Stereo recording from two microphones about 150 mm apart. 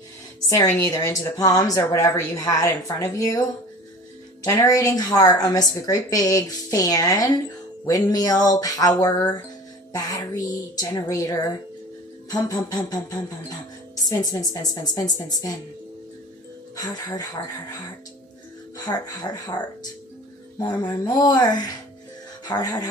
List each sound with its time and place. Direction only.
0.5 s a woman's voice: 20° left (ahead or behind)
16.7 s a woman's voice: 25° left (ahead or behind)
18.9 s a woman's voice: 30° left (ahead or behind)